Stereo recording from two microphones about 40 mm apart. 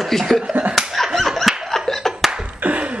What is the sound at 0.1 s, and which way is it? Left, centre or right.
Speech, centre.